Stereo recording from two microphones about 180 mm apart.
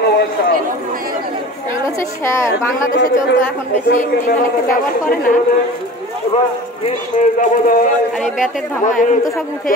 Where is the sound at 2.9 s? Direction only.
65° left (ahead or behind).